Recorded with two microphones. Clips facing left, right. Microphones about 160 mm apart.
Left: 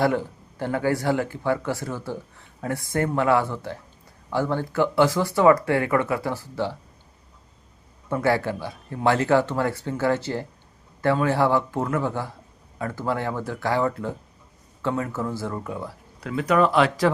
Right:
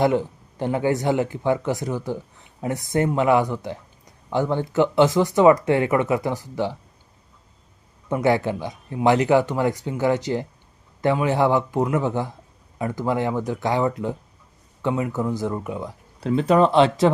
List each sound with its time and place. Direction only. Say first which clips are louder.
0.0 s speech: right 3 dB; 20° right (ahead or behind)
8.1 s speech: right 2 dB; 20° right (ahead or behind)